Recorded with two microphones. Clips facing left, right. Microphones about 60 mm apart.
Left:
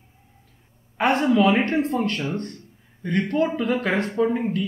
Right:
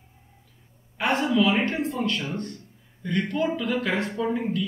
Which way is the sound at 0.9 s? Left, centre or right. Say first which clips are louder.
Left 4 dB; left.